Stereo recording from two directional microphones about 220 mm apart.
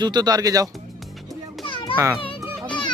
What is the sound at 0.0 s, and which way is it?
Speech, 20° right (ahead or behind).